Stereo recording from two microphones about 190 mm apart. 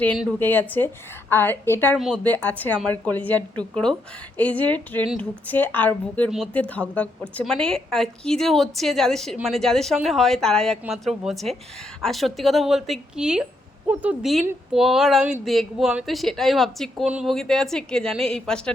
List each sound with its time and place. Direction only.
0.2 s a woman's voice: 10° left (ahead or behind)